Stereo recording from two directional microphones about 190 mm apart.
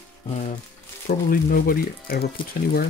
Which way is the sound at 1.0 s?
50° left (ahead or behind).